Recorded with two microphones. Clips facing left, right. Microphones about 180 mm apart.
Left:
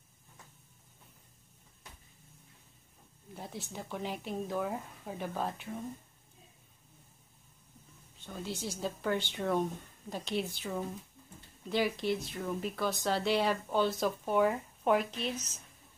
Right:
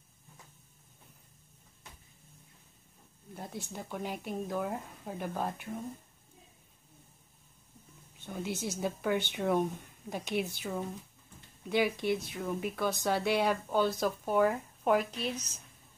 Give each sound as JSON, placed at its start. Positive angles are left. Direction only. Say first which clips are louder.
{"t": 3.3, "sound": "speech", "louder": "right 1 dB", "side_deg": 5}
{"t": 8.3, "sound": "a woman's voice", "louder": "right 3 dB", "side_deg": -10}
{"t": 10.6, "sound": "speech", "louder": "even", "side_deg": -5}
{"t": 12.0, "sound": "a woman's voice", "louder": "right 1 dB", "side_deg": -55}
{"t": 12.4, "sound": "speech", "louder": "right 1 dB", "side_deg": -5}